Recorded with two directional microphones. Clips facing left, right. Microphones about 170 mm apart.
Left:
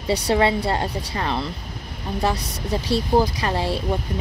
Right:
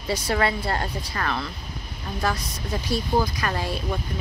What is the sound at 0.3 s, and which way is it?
Speech, 30° left (ahead or behind).